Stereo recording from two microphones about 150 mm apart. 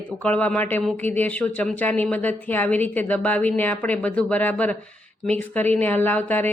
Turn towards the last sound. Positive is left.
turn(degrees=10)  # may be behind; listen again after turning